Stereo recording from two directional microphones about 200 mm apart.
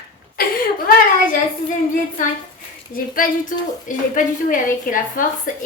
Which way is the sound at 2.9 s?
45° left (ahead or behind).